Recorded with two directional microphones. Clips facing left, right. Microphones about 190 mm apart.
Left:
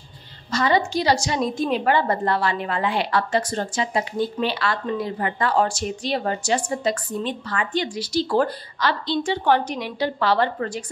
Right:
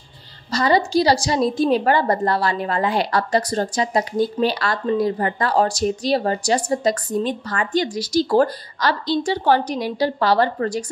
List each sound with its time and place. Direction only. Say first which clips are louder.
0.5 s a woman's voice: right 3 dB; 35° right (ahead or behind)